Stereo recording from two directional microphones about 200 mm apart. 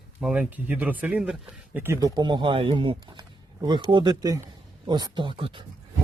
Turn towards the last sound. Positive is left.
turn(degrees=-25)  # may be behind; listen again after turning